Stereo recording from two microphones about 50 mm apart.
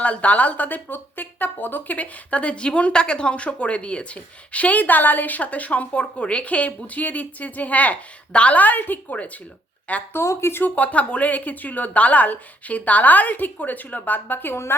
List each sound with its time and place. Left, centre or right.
0.0 s speech: left
10.1 s speech: left
10.6 s speech: left